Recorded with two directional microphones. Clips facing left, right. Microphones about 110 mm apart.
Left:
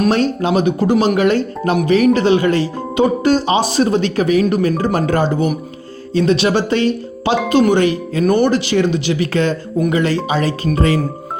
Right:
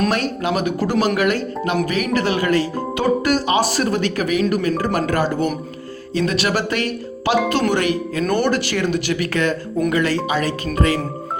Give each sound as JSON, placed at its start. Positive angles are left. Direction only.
{"t": 0.1, "sound": "speech", "side_deg": 30}
{"t": 8.2, "sound": "speech", "side_deg": 15}